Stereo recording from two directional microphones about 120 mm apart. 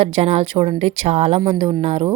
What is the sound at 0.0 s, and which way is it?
A woman's voice, 55° right (ahead or behind).